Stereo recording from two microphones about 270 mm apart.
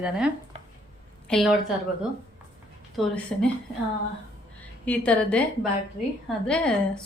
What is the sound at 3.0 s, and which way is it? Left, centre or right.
Speech, centre.